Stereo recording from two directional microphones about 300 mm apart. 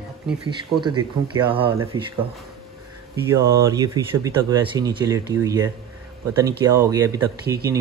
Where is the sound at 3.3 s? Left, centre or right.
Centre.